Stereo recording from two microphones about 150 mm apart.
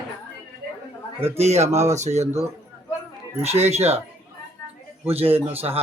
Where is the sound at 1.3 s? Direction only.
45° right (ahead or behind).